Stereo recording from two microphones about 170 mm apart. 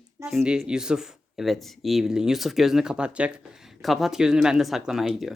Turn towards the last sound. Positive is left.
turn(degrees=0)  # may be behind; listen again after turning